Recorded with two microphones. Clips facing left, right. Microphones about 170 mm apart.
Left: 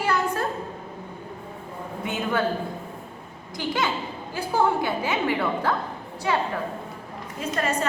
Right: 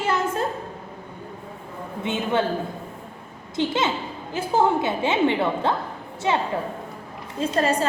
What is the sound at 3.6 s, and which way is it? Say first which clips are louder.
A woman's voice: right 3 dB; 25° right (ahead or behind).